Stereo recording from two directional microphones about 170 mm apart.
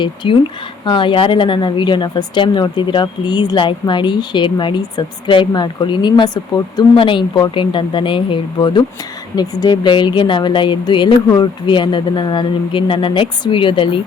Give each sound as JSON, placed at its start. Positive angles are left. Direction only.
{"t": 0.0, "sound": "speech", "side_deg": 30}